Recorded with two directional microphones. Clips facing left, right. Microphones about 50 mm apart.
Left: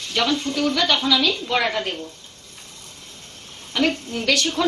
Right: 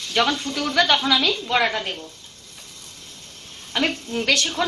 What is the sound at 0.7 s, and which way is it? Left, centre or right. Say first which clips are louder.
Speech: right 5 dB; right.